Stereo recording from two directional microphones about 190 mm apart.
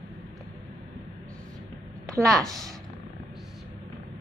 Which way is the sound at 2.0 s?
15° right (ahead or behind).